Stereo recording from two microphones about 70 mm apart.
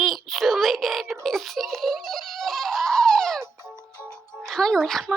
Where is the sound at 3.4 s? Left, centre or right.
Right.